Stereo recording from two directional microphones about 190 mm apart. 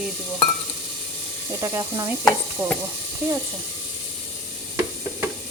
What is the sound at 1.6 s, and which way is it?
Speech, 20° right (ahead or behind).